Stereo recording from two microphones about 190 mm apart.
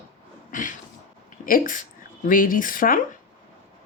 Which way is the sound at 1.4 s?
45° left (ahead or behind).